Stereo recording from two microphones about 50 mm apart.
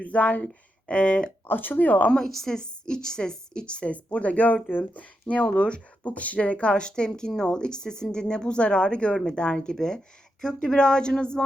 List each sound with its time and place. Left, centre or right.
0.0 s speech: left
1.5 s speech: left
2.0 s a woman's voice: centre